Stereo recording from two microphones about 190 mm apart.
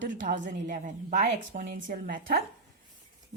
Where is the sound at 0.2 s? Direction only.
40° right (ahead or behind).